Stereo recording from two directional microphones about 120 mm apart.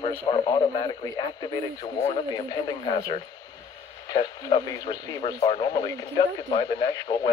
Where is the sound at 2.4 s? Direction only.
45° left (ahead or behind).